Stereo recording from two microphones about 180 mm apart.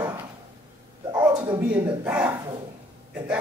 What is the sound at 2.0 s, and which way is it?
Speech, 10° right (ahead or behind).